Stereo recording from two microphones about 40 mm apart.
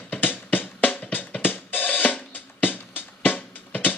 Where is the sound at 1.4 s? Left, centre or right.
Left.